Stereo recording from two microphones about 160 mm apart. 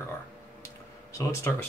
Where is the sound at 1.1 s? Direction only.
20° left (ahead or behind).